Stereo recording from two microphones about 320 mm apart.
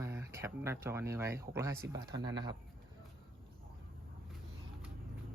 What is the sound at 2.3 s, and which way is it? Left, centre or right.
Speech, centre.